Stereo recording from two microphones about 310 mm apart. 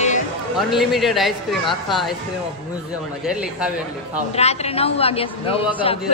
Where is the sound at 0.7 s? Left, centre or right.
Centre.